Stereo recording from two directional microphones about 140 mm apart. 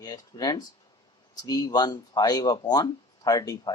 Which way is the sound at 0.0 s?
25° left (ahead or behind).